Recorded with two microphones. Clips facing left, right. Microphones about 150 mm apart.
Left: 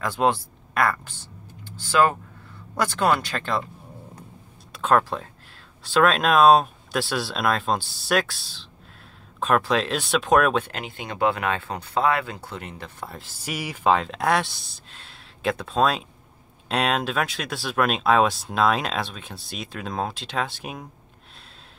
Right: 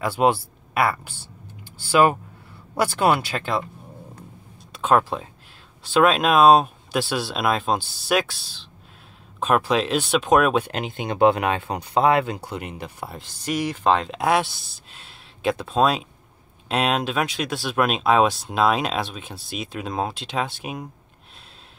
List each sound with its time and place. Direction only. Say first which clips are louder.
0.0 s speech: right 2 dB; 10° right (ahead or behind)
4.7 s speech: right 1 dB; 5° right (ahead or behind)
10.7 s speech: right 6 dB; 20° right (ahead or behind)
13.2 s speech: right 8 dB; 5° left (ahead or behind)